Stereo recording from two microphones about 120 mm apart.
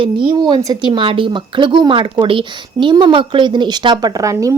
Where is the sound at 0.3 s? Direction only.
35° right (ahead or behind).